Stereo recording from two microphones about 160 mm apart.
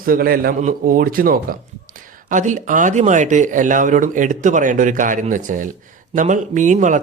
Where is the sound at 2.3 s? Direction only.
50° right (ahead or behind).